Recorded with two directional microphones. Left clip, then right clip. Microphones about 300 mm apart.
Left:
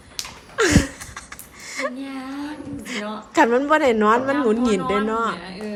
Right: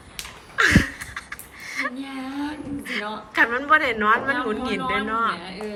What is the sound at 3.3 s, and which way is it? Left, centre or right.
A woman's voice, centre.